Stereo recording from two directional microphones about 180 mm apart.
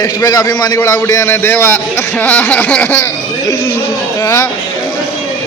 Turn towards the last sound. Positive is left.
turn(degrees=15)  # may be behind; listen again after turning